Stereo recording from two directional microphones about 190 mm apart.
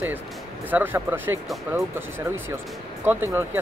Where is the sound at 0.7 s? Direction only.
10° right (ahead or behind).